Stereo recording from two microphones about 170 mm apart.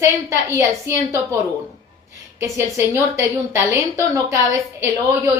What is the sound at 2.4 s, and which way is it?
A woman's voice, 15° right (ahead or behind).